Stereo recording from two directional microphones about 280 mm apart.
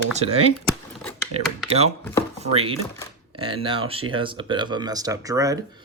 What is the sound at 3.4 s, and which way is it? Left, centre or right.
Speech, centre.